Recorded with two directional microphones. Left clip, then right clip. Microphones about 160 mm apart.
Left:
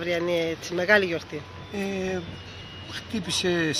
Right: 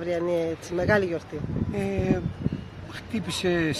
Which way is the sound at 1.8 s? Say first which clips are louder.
Right 1 dB; 20° right (ahead or behind).